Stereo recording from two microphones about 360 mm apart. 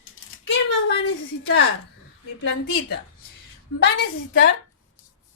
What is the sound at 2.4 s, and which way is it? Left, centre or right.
Speech, left.